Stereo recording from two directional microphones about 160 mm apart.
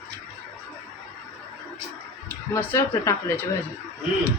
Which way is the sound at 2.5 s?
15° left (ahead or behind).